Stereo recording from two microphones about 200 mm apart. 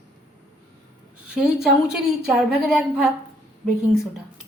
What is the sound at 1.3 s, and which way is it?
A woman's voice, 5° right (ahead or behind).